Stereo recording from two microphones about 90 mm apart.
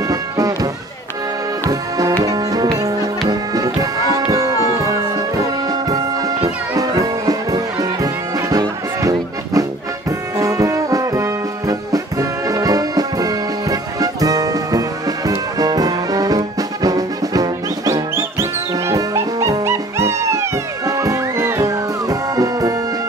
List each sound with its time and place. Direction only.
0.1 s music: 40° right (ahead or behind)
1.7 s music: 40° right (ahead or behind)
10.3 s brass instrument: 35° right (ahead or behind)
18.9 s music: 40° right (ahead or behind)